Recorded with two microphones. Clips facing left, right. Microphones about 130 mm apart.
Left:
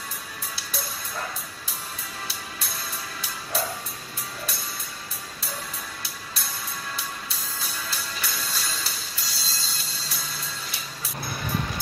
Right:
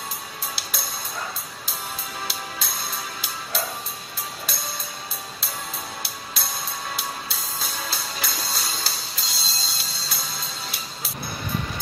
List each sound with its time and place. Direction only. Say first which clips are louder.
0.6 s music: right 1 dB; 90° right
2.2 s music: right 5 dB; 90° right
6.0 s music: right 3 dB; 90° right